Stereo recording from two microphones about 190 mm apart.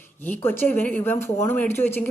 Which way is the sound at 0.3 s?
10° left (ahead or behind).